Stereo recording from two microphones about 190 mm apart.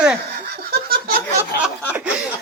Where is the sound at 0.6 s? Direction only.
55° right (ahead or behind).